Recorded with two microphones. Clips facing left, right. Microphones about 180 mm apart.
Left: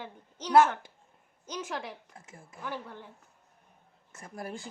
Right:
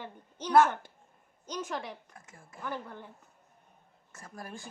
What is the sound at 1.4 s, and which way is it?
Speech, 5° left (ahead or behind).